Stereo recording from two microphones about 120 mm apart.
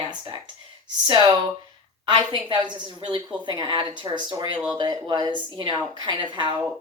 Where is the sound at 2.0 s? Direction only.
40° right (ahead or behind).